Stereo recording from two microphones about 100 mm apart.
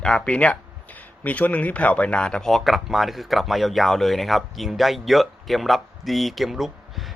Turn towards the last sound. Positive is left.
turn(degrees=0)  # may be behind; listen again after turning